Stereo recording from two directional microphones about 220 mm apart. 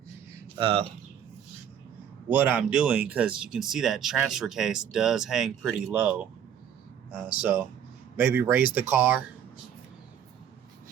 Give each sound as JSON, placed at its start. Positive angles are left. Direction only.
{"t": 0.6, "sound": "speech", "side_deg": -25}
{"t": 2.3, "sound": "speech", "side_deg": -10}